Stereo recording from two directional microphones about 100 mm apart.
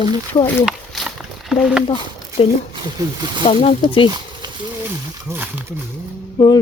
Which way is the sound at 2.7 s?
45° right (ahead or behind).